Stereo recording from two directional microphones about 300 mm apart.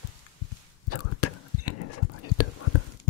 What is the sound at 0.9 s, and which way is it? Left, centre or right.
Whispering, left.